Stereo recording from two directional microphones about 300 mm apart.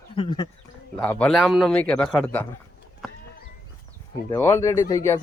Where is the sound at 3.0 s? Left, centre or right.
Centre.